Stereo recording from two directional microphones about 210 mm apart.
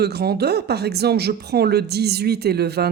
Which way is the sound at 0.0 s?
50° right (ahead or behind).